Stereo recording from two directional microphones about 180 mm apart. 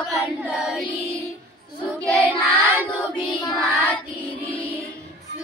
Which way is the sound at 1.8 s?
5° left (ahead or behind).